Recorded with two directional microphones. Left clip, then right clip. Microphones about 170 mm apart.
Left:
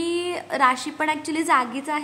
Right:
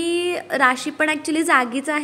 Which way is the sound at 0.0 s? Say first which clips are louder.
Right 4 dB; 15° right (ahead or behind).